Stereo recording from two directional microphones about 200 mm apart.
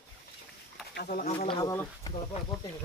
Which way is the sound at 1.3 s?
25° left (ahead or behind).